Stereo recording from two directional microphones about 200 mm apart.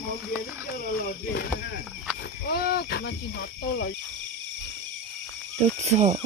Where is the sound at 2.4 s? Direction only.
50° left (ahead or behind).